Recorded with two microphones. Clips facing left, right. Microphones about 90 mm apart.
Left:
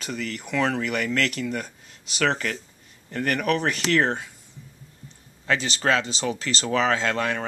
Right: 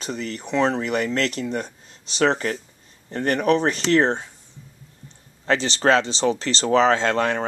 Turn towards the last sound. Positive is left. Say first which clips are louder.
# right 4 dB
turn(degrees=-30)  # may be behind; listen again after turning